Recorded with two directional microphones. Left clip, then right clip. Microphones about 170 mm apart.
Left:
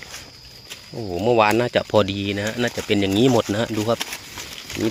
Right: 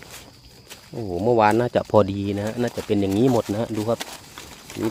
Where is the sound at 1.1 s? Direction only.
20° right (ahead or behind).